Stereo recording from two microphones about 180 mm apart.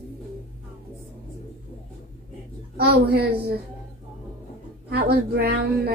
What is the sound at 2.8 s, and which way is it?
Speech, 60° right (ahead or behind).